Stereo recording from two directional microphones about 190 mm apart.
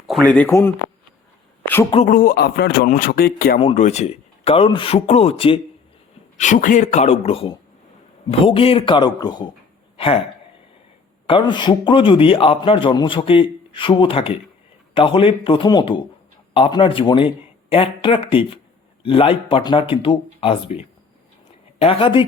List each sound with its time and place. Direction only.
0.3 s speech: 10° left (ahead or behind)
1.6 s a sound: 10° left (ahead or behind)
2.0 s a man's voice: 50° left (ahead or behind)
3.6 s speech: 30° left (ahead or behind)
6.3 s a man's voice: 40° left (ahead or behind); by 9.5 s 20° left (ahead or behind)
11.3 s a man's voice: 25° left (ahead or behind)